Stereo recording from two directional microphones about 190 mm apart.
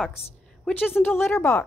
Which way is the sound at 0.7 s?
10° left (ahead or behind).